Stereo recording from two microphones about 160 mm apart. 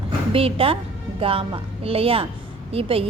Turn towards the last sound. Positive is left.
turn(degrees=-35)  # may be behind; listen again after turning